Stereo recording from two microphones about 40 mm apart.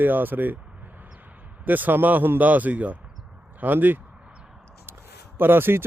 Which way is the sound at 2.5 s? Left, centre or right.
Right.